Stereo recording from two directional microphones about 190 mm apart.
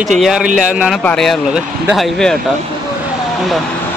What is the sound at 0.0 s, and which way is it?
A man's voice, centre (ahead or behind).